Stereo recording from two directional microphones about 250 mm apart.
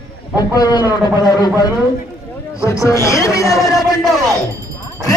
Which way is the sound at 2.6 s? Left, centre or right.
Centre.